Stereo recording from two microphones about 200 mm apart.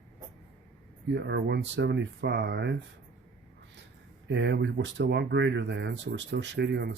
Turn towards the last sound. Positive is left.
turn(degrees=-55)  # may be behind; listen again after turning